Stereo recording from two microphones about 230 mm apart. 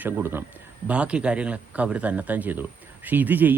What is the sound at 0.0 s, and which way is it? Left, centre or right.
A man's voice, centre.